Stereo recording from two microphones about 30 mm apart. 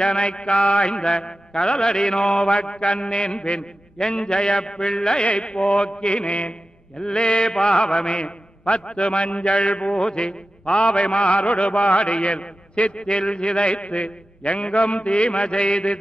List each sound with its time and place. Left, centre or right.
0.0 s mantra: left
7.0 s mantra: left